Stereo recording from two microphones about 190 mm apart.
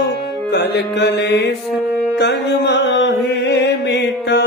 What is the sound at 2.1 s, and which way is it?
Music, 65° left (ahead or behind).